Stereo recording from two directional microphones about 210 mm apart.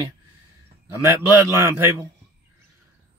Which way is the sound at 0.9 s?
10° right (ahead or behind).